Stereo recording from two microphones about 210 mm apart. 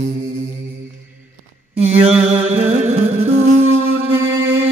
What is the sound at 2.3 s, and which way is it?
Music, 30° right (ahead or behind).